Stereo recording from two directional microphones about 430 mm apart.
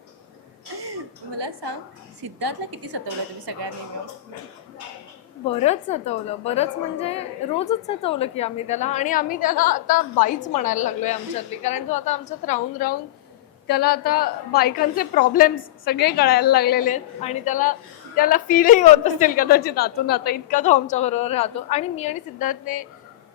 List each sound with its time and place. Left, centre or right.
1.4 s a woman's voice: right
2.4 s a woman's voice: right
5.5 s a woman's voice: centre